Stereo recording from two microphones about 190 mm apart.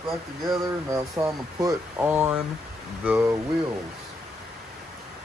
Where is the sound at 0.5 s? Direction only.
20° right (ahead or behind).